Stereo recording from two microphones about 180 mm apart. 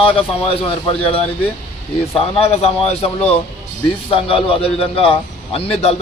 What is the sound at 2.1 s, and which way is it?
Speech, 35° left (ahead or behind).